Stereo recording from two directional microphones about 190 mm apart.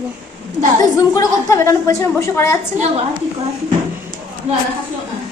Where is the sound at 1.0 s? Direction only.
15° left (ahead or behind).